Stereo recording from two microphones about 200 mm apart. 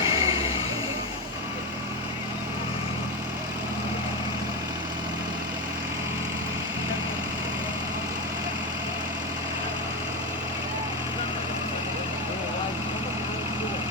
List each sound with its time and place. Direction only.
0.0 s vehicle: 15° right (ahead or behind)